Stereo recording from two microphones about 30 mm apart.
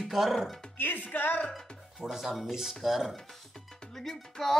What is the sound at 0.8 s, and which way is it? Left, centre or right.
Speech, left.